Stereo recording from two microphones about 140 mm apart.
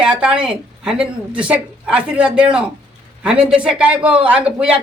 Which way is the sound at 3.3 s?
45° right (ahead or behind).